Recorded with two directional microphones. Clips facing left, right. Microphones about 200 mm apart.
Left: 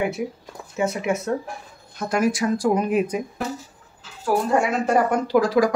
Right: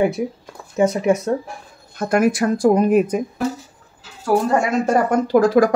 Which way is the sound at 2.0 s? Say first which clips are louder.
Right 5 dB; 55° right (ahead or behind).